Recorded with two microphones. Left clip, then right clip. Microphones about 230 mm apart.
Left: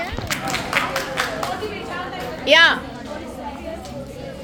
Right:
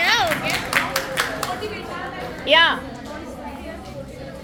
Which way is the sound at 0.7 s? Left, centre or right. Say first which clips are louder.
Left 2 dB; right.